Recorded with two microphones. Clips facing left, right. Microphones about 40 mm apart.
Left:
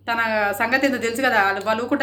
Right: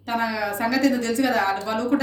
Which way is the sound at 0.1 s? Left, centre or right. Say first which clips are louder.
Left 4 dB; left.